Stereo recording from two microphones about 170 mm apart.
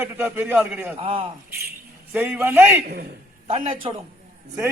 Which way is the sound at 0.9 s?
35° right (ahead or behind).